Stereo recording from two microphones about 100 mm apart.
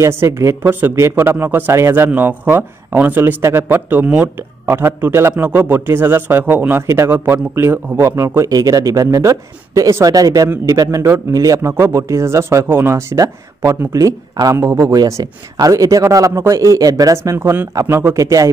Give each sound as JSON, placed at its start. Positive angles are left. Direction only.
{"t": 0.0, "sound": "a man's voice", "side_deg": -25}